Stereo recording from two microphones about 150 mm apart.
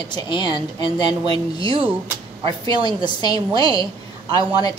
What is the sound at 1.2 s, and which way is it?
A woman's voice, 35° right (ahead or behind).